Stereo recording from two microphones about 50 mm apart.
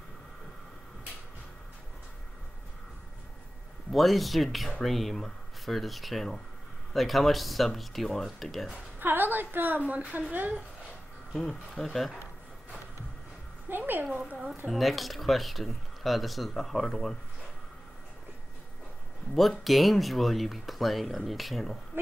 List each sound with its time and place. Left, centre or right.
3.9 s speech: centre
9.0 s a woman's voice: right
11.3 s speech: centre
13.7 s a sound: right
14.7 s speech: centre
19.6 s speech: centre